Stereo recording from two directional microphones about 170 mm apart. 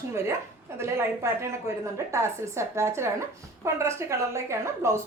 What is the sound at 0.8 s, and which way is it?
A woman's voice, 15° right (ahead or behind).